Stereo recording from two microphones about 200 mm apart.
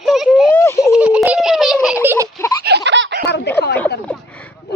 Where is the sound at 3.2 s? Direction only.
55° left (ahead or behind).